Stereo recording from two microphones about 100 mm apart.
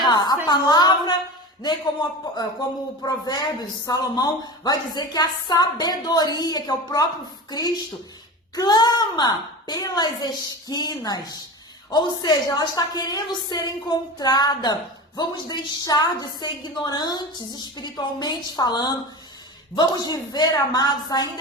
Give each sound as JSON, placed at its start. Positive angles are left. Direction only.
{"t": 0.0, "sound": "music", "side_deg": 45}
{"t": 0.4, "sound": "a woman's voice", "side_deg": 45}